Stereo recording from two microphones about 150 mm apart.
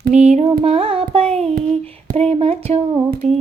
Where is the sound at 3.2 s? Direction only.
50° right (ahead or behind).